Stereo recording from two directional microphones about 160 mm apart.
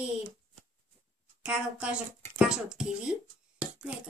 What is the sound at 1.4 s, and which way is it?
Speech, 5° right (ahead or behind).